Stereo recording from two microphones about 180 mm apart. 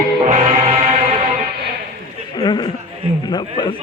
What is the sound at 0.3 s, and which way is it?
Music, 40° right (ahead or behind).